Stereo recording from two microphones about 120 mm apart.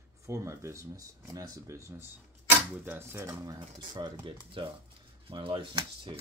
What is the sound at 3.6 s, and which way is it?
Speech, 40° right (ahead or behind).